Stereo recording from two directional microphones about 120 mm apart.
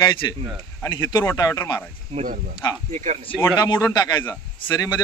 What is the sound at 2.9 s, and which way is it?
Speech, 70° right (ahead or behind).